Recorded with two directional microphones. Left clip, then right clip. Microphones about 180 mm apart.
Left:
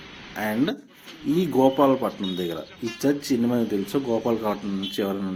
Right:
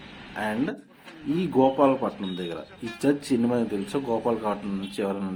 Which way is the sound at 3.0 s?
10° left (ahead or behind).